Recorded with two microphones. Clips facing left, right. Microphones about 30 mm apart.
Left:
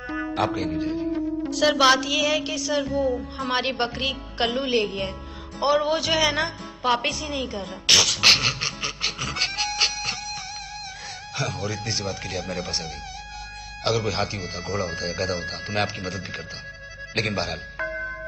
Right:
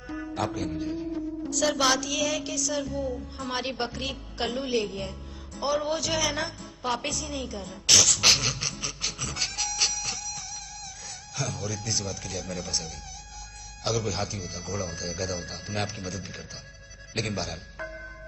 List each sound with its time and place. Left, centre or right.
0.1 s speech: left
17.1 s music: left